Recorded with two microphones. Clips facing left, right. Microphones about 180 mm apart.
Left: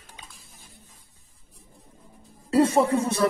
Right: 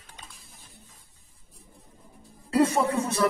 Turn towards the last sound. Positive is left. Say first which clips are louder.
# left 3 dB
turn(degrees=30)  # may be behind; listen again after turning